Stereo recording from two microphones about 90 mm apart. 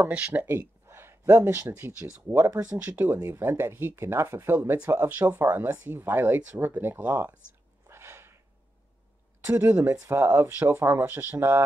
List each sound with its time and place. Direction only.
0.1 s speech: 15° right (ahead or behind)
4.6 s speech: 15° right (ahead or behind)
7.9 s a sound: 30° right (ahead or behind)
9.4 s speech: 25° right (ahead or behind)